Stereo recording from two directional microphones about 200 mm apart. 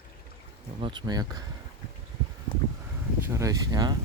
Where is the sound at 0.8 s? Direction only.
25° right (ahead or behind).